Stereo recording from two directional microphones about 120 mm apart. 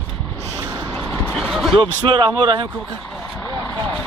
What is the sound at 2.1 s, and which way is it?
Speech, 40° right (ahead or behind).